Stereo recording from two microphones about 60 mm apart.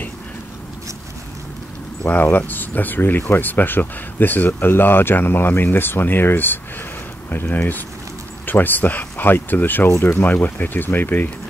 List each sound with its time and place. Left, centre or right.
2.3 s speech: left